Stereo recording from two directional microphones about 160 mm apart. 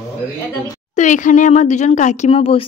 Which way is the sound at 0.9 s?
50° left (ahead or behind).